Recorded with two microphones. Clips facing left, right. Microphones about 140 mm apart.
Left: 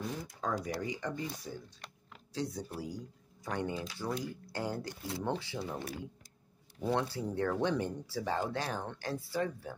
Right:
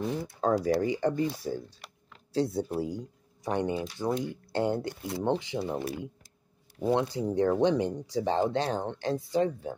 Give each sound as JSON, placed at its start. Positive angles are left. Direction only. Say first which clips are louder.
{"t": 0.0, "sound": "speech", "louder": "right 8 dB", "side_deg": -30}
{"t": 6.8, "sound": "speech", "louder": "right 6 dB", "side_deg": -15}